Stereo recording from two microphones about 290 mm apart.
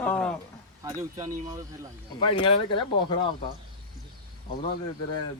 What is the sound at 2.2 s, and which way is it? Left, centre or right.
Speech, centre.